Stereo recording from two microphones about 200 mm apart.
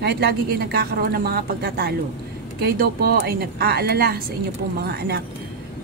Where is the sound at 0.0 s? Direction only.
50° right (ahead or behind).